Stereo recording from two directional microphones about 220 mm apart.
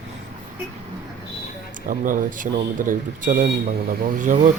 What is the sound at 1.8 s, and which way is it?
Speech, 40° right (ahead or behind).